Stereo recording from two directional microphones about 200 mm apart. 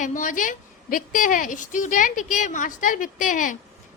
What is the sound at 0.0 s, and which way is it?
A woman's voice, 40° left (ahead or behind).